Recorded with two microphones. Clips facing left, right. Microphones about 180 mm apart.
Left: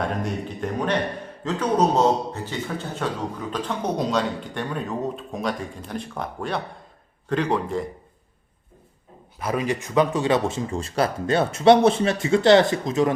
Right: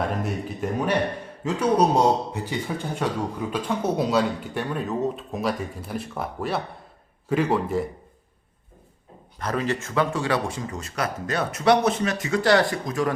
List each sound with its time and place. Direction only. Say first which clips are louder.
0.0 s a man's voice: even; 5° right (ahead or behind)
9.4 s speech: left 1 dB; 10° left (ahead or behind)